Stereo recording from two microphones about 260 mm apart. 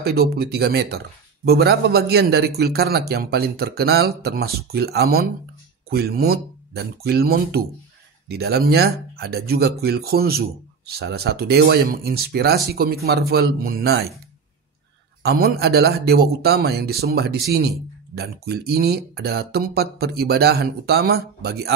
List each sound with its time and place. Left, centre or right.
0.0 s speech: right
15.2 s speech: right